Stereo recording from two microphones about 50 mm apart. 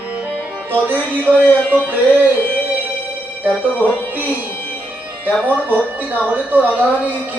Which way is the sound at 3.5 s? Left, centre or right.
Right.